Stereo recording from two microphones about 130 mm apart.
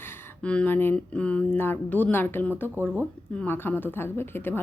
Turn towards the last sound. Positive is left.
turn(degrees=15)  # may be behind; listen again after turning